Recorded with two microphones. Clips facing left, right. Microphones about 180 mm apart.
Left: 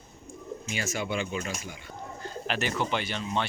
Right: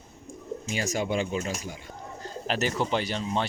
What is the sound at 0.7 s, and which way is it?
Speech, 40° right (ahead or behind).